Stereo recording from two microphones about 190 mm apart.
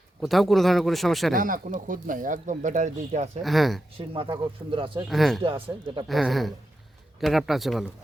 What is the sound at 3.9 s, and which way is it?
Speech, 30° right (ahead or behind).